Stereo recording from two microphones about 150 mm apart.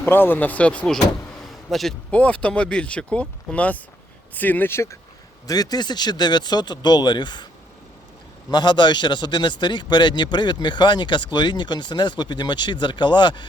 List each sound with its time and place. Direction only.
0.0 s speech: 15° left (ahead or behind); by 7.4 s 30° left (ahead or behind)
8.4 s a man's voice: 30° left (ahead or behind)